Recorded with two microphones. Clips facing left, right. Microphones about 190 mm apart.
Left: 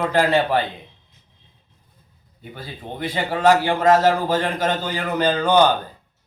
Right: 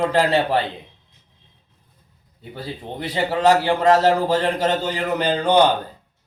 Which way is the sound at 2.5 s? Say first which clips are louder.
Right 3 dB; 30° right (ahead or behind).